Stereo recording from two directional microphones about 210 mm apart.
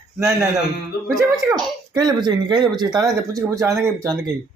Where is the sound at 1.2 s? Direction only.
15° right (ahead or behind).